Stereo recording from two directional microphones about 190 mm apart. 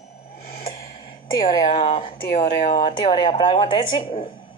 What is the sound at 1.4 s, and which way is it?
A woman's voice, 25° left (ahead or behind).